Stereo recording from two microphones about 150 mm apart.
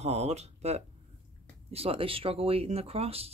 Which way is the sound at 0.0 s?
45° right (ahead or behind).